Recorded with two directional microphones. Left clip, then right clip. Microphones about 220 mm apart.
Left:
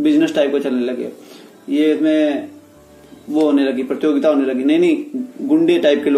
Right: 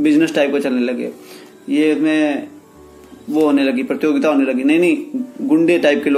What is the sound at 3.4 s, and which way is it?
A man's voice, 35° right (ahead or behind).